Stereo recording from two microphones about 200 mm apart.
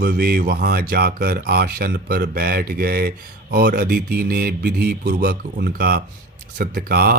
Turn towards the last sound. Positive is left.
turn(degrees=-50)  # may be behind; listen again after turning